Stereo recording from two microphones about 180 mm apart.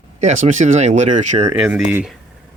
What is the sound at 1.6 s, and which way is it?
Speech, 5° right (ahead or behind).